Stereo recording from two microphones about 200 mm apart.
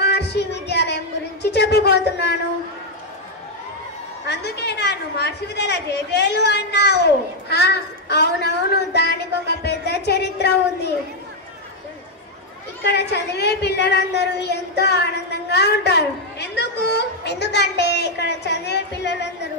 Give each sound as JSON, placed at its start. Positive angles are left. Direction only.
{"t": 0.0, "sound": "a sound", "side_deg": 55}
{"t": 4.3, "sound": "a woman's voice", "side_deg": 55}
{"t": 12.8, "sound": "a woman's voice", "side_deg": 55}